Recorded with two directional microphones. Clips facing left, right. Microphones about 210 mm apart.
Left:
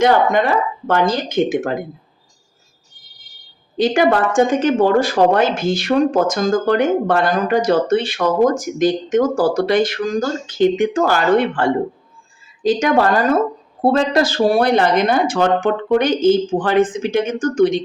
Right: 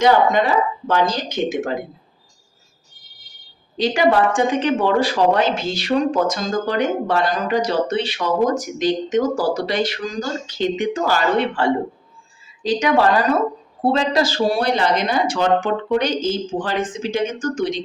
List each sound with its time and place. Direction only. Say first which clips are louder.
0.0 s speech: left 1 dB; 55° left (ahead or behind)
3.8 s a woman's voice: left 2 dB; 50° left (ahead or behind)